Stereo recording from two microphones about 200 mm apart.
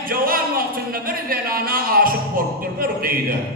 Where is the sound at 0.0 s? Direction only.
45° right (ahead or behind).